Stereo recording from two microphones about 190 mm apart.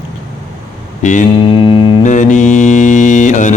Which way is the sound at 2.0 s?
40° left (ahead or behind).